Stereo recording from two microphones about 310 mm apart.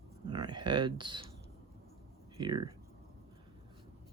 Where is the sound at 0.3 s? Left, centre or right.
Centre.